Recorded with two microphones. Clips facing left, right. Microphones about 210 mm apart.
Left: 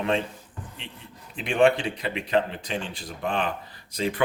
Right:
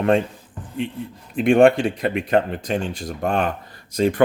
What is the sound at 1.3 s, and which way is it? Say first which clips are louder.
Speech: right 7 dB; 50° right (ahead or behind).